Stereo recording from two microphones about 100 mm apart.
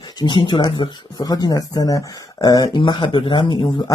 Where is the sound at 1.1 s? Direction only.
40° left (ahead or behind).